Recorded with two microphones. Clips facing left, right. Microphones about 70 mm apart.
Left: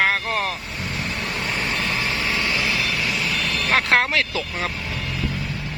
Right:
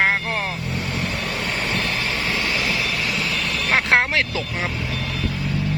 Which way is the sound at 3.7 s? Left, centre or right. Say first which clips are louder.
Right 1 dB; centre.